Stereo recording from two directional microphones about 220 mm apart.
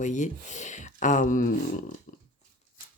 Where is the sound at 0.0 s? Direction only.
35° left (ahead or behind).